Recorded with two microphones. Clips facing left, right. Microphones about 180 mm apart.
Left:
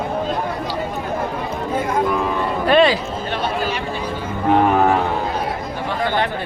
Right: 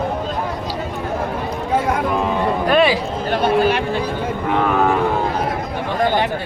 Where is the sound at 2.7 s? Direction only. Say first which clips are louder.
Left 2 dB; 5° right (ahead or behind).